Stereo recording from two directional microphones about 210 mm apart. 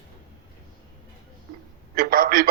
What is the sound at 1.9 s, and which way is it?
Speech, 45° right (ahead or behind).